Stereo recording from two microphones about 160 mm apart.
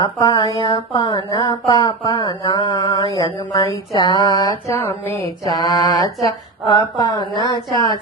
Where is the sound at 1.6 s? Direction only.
20° left (ahead or behind).